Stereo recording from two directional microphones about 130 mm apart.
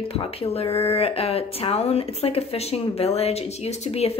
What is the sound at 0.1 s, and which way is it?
Speech, 50° left (ahead or behind).